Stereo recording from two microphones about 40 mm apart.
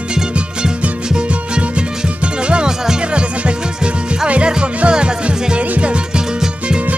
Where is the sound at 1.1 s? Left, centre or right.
Right.